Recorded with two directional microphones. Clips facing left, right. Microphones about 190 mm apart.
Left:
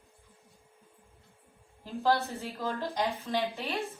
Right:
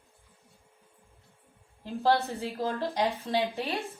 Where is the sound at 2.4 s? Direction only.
35° right (ahead or behind).